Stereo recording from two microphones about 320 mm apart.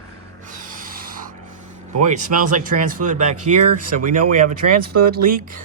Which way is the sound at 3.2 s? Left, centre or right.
Right.